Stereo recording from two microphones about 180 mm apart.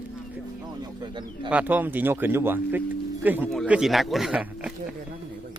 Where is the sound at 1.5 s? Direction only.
10° right (ahead or behind).